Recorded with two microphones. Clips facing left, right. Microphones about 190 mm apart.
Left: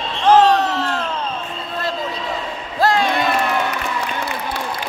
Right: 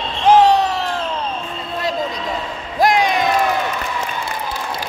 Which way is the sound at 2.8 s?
15° right (ahead or behind).